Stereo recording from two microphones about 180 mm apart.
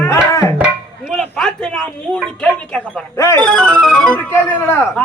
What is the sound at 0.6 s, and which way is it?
A man's voice, 5° right (ahead or behind).